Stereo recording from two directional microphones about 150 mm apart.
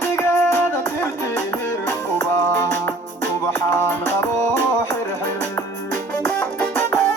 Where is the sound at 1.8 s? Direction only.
20° left (ahead or behind).